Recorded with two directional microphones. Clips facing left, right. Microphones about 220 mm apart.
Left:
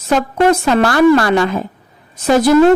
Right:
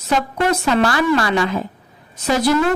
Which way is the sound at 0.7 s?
50° left (ahead or behind).